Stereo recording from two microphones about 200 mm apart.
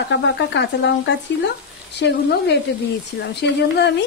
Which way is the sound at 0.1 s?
65° left (ahead or behind).